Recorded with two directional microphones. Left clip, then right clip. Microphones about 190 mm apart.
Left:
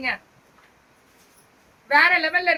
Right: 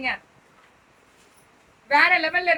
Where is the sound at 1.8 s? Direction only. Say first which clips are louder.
Left 1 dB; 15° left (ahead or behind).